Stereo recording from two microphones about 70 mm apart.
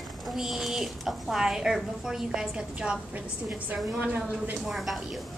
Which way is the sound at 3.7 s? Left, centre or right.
Right.